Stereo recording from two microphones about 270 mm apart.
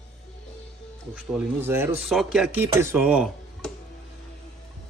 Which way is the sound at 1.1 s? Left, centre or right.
Centre.